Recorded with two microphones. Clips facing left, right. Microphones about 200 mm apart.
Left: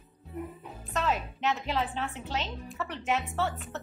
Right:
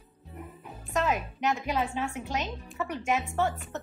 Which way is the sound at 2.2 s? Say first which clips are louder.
Right 2 dB; 15° right (ahead or behind).